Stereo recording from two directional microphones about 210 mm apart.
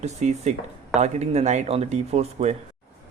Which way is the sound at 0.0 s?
35° right (ahead or behind).